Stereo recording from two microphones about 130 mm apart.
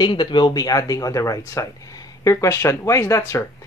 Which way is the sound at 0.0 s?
35° left (ahead or behind).